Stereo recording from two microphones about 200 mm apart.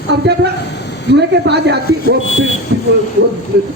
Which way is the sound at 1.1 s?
55° right (ahead or behind).